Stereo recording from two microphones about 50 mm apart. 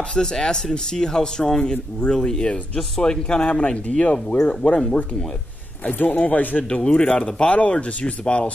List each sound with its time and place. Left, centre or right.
0.1 s speech: centre
5.9 s speech: left
6.8 s speech: centre